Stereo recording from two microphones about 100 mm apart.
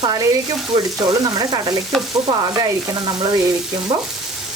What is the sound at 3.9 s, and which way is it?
Stir, 60° right (ahead or behind).